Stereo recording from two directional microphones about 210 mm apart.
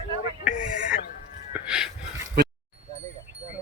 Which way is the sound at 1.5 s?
5° right (ahead or behind).